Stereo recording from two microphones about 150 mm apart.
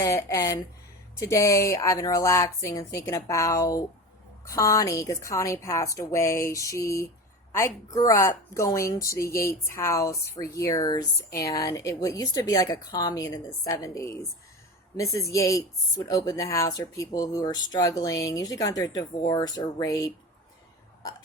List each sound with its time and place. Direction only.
0.0 s speech: 20° left (ahead or behind)